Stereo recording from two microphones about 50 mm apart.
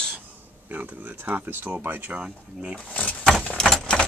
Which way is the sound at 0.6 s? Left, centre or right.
Right.